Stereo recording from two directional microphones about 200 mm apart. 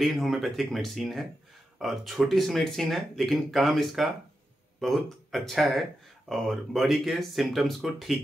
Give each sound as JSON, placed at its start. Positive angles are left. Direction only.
{"t": 0.0, "sound": "speech", "side_deg": 0}